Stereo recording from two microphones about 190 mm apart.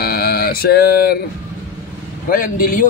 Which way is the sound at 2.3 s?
45° left (ahead or behind).